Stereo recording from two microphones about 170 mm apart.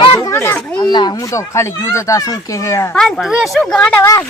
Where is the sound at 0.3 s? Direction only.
15° left (ahead or behind).